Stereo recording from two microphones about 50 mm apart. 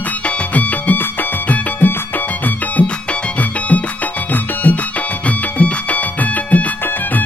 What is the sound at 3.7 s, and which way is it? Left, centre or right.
Music, left.